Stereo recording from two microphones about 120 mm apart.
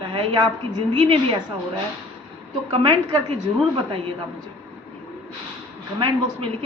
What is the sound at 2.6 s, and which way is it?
Speech, 45° right (ahead or behind).